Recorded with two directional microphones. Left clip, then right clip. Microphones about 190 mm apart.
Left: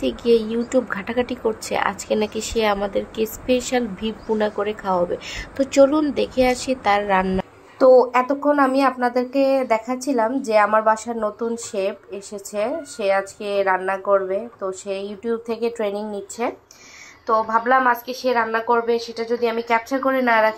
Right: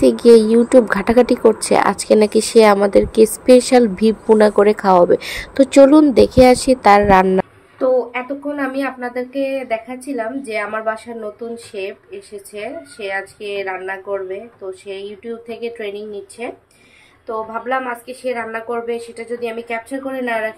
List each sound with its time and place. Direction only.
0.0 s speech: 25° right (ahead or behind)
7.9 s speech: 10° left (ahead or behind)
9.9 s a woman's voice: centre (ahead or behind)
13.1 s speech: 10° left (ahead or behind)
17.3 s a woman's voice: 5° left (ahead or behind)